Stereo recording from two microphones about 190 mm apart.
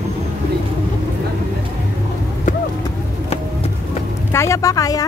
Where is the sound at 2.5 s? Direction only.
45° left (ahead or behind).